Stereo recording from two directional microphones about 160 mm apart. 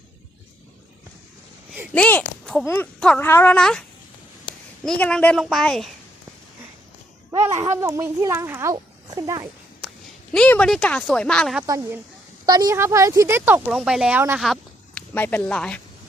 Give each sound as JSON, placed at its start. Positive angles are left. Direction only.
{"t": 1.9, "sound": "speech", "side_deg": 10}
{"t": 7.3, "sound": "a child's voice", "side_deg": -20}
{"t": 10.3, "sound": "speech", "side_deg": 5}
{"t": 11.6, "sound": "a child's voice", "side_deg": -20}
{"t": 14.4, "sound": "a sound", "side_deg": 0}
{"t": 15.1, "sound": "speech", "side_deg": 10}